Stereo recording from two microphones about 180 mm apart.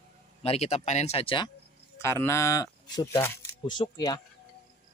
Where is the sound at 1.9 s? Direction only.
15° left (ahead or behind).